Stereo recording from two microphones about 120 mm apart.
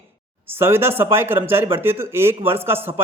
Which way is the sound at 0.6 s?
20° right (ahead or behind).